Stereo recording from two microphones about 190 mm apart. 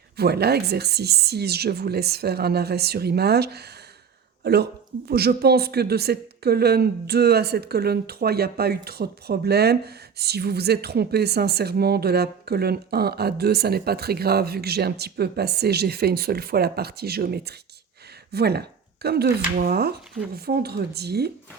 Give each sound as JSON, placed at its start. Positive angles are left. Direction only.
{"t": 0.2, "sound": "speech", "side_deg": -55}